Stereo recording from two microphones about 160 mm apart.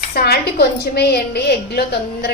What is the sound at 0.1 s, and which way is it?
A woman's voice, 75° left (ahead or behind).